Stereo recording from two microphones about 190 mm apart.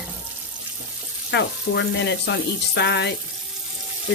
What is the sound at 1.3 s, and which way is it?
Speech, 65° left (ahead or behind).